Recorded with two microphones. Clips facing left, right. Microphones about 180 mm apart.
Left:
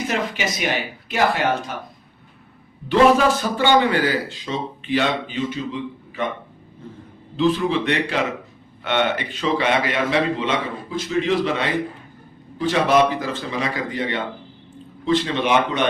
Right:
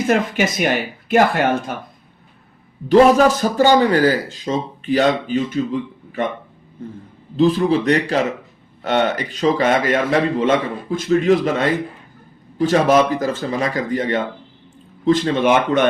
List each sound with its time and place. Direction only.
0.1 s a man's voice: 50° right (ahead or behind)
2.9 s a man's voice: 40° right (ahead or behind)
7.3 s a man's voice: 40° right (ahead or behind)